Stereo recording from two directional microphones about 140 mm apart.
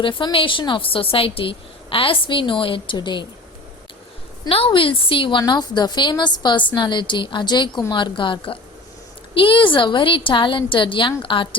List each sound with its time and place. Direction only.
0.0 s a woman's voice: 35° left (ahead or behind)
4.4 s a woman's voice: 40° left (ahead or behind)